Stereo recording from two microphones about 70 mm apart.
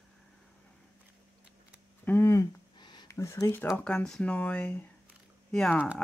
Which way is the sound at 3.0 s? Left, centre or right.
Left.